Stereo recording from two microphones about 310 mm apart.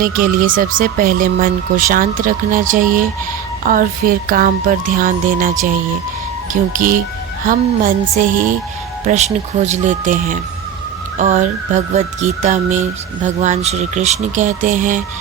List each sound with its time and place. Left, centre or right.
0.0 s speech: right